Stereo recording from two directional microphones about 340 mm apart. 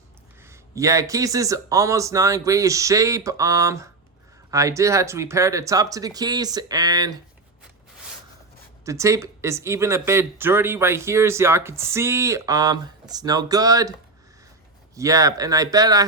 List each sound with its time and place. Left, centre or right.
0.4 s speech: centre
8.8 s speech: centre
14.9 s speech: centre